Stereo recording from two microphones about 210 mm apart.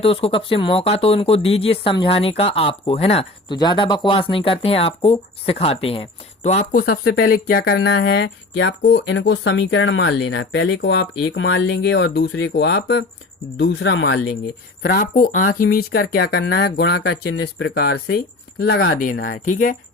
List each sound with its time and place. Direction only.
0.0 s speech: 25° left (ahead or behind); by 14.2 s 60° left (ahead or behind)
14.8 s speech: 45° left (ahead or behind)